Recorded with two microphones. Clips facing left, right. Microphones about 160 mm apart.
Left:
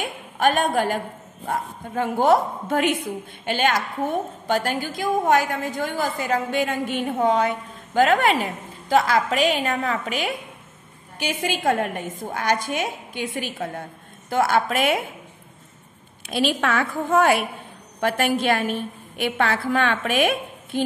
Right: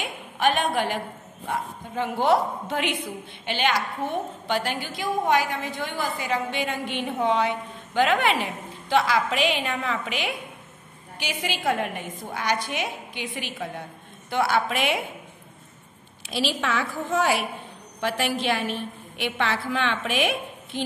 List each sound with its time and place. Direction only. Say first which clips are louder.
0.0 s a sound: left 3 dB; 45° left (ahead or behind)
1.5 s a woman's voice: left 3 dB; 45° left (ahead or behind)
16.2 s a woman's voice: left 5 dB; 50° left (ahead or behind)